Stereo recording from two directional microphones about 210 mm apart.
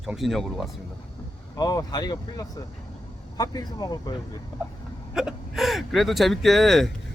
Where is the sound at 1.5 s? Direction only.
20° left (ahead or behind).